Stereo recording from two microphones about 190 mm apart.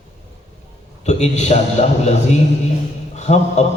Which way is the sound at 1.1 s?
35° left (ahead or behind).